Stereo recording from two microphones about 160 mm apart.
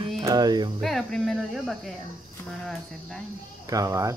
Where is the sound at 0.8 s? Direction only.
Centre (ahead or behind).